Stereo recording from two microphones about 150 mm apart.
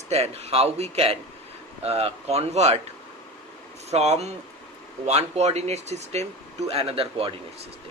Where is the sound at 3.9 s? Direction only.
45° right (ahead or behind).